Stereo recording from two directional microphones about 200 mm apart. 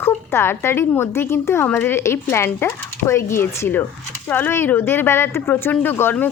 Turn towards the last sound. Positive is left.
turn(degrees=10)  # may be behind; listen again after turning